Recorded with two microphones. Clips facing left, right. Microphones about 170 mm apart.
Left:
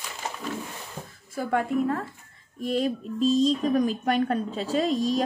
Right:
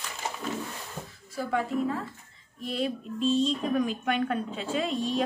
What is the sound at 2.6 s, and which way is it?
A woman's voice, 45° left (ahead or behind).